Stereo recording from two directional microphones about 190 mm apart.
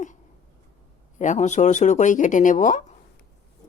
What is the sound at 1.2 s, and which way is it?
Speech, 40° left (ahead or behind).